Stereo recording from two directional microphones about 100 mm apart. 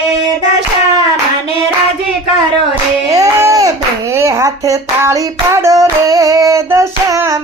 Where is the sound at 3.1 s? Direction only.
35° right (ahead or behind).